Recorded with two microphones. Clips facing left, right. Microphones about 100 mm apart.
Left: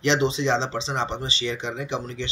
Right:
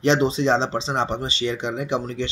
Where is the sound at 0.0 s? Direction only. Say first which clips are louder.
Right 3 dB; 45° right (ahead or behind).